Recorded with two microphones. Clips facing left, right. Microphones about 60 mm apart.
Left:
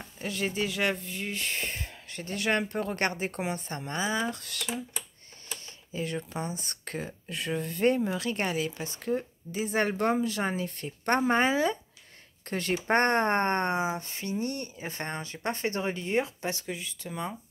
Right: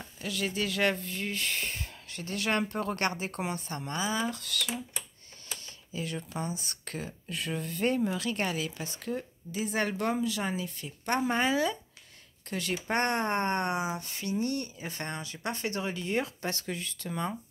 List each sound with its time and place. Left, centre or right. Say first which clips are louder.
0.0 s speech: left 2 dB; left
0.7 s speech: right 1 dB; centre
6.4 s speech: left 1 dB; left; by 17.3 s centre